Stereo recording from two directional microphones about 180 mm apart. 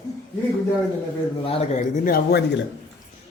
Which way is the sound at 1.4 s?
30° left (ahead or behind).